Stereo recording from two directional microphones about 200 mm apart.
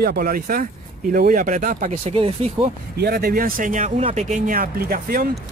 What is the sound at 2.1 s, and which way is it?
Speech, 30° right (ahead or behind).